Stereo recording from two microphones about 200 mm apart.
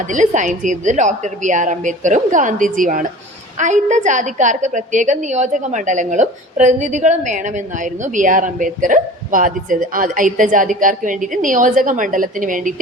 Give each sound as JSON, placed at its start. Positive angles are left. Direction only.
{"t": 0.1, "sound": "speech", "side_deg": -40}